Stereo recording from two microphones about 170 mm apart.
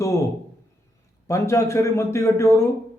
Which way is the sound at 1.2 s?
20° left (ahead or behind).